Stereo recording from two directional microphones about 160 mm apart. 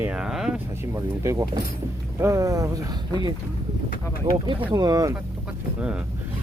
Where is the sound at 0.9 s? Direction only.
20° right (ahead or behind).